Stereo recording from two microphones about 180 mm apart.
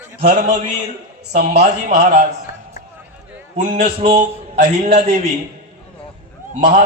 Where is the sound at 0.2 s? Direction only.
45° right (ahead or behind).